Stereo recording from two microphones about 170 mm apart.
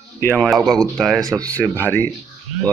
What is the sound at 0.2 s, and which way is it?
Speech, 10° left (ahead or behind).